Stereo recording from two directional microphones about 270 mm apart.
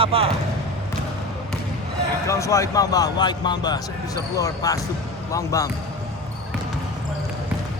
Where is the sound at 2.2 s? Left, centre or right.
Centre.